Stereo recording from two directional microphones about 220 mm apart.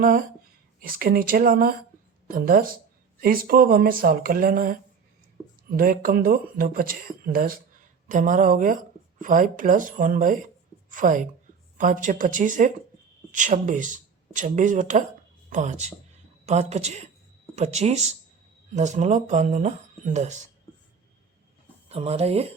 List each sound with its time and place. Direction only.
0.0 s speech: 40° right (ahead or behind)
5.4 s a sound: 10° right (ahead or behind)
5.7 s a woman's voice: 40° right (ahead or behind)
21.8 s speech: 30° right (ahead or behind)